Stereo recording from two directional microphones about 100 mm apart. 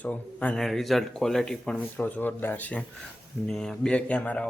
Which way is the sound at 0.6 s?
Centre (ahead or behind).